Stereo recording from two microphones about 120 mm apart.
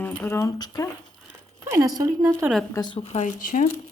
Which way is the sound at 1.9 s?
35° right (ahead or behind).